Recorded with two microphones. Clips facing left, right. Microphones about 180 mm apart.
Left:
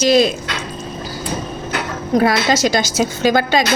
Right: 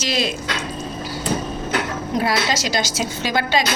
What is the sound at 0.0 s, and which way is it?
Speech, 45° left (ahead or behind).